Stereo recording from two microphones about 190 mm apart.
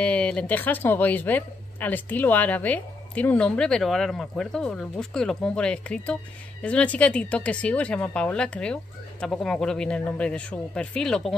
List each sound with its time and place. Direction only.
0.0 s speech: 5° left (ahead or behind)